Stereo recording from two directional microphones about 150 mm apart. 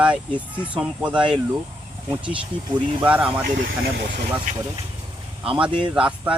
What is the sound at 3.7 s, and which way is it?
Speech, 90° right.